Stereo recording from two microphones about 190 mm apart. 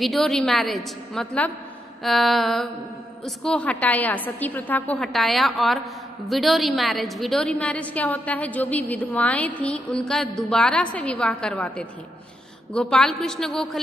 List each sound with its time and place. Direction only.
0.0 s a woman's voice: centre (ahead or behind)